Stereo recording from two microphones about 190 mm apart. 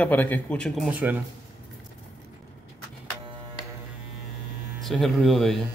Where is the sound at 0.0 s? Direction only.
10° left (ahead or behind); by 1.2 s 10° right (ahead or behind).